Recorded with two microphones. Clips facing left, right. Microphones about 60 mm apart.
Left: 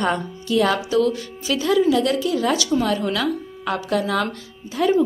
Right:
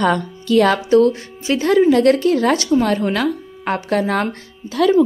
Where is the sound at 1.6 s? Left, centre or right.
Right.